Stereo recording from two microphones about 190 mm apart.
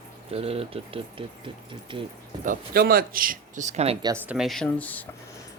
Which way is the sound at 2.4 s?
50° right (ahead or behind).